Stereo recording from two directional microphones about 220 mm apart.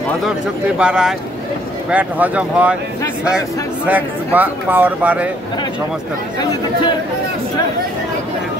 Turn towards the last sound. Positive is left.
turn(degrees=20)  # may be behind; listen again after turning